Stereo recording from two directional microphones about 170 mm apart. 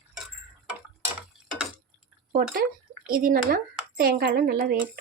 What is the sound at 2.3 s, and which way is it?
Speech, 60° right (ahead or behind).